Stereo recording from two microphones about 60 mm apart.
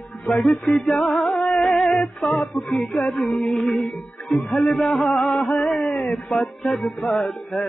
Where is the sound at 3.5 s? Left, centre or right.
Centre.